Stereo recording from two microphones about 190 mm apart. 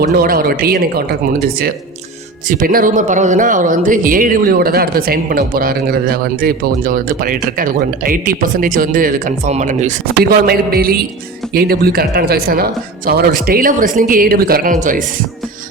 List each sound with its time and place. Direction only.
0.0 s speech: 50° right (ahead or behind)
2.5 s speech: 45° right (ahead or behind)